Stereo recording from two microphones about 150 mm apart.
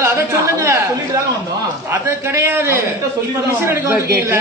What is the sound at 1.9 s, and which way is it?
A man's voice, 15° right (ahead or behind).